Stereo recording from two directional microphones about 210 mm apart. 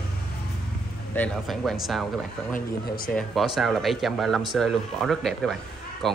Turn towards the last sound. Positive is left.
turn(degrees=0)  # may be behind; listen again after turning